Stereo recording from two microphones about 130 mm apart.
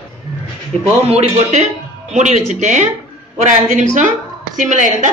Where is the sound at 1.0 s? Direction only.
55° right (ahead or behind).